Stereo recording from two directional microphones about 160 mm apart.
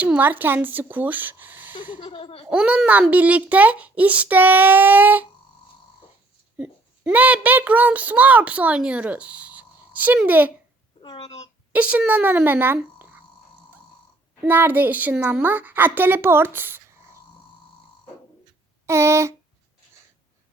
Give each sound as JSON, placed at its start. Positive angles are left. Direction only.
{"t": 0.0, "sound": "a child's voice", "side_deg": -10}
{"t": 2.0, "sound": "a sound", "side_deg": 35}
{"t": 2.5, "sound": "a child's voice", "side_deg": -10}
{"t": 6.6, "sound": "a child's voice", "side_deg": -10}
{"t": 11.0, "sound": "a woman's voice", "side_deg": 30}
{"t": 11.7, "sound": "speech", "side_deg": -10}
{"t": 14.4, "sound": "a child's voice", "side_deg": -10}
{"t": 18.9, "sound": "a child's voice", "side_deg": -15}